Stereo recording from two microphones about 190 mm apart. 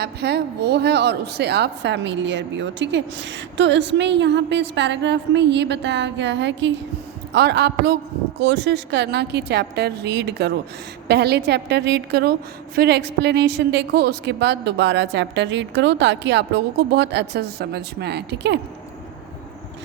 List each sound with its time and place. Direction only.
0.0 s a woman's voice: 60° right (ahead or behind)